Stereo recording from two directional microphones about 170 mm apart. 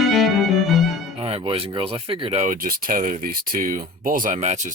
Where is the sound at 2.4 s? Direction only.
55° right (ahead or behind).